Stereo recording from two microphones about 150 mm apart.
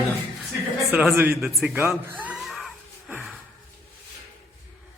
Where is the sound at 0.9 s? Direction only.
10° right (ahead or behind).